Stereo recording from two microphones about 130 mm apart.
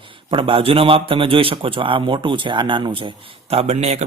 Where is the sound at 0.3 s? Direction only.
40° right (ahead or behind).